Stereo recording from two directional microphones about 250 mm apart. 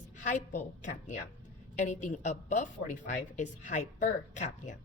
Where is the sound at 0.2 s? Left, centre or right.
Left.